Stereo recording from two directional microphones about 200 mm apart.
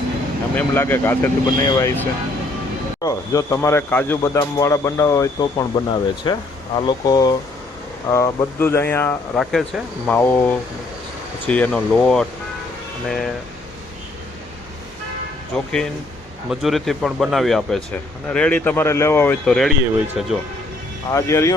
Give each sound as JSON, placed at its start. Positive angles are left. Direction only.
{"t": 0.5, "sound": "speech", "side_deg": 10}
{"t": 16.5, "sound": "speech", "side_deg": 0}
{"t": 21.1, "sound": "speech", "side_deg": 15}